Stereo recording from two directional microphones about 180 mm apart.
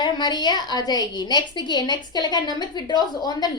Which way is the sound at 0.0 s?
25° left (ahead or behind).